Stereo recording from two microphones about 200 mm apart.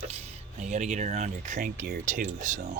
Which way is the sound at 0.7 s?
35° right (ahead or behind).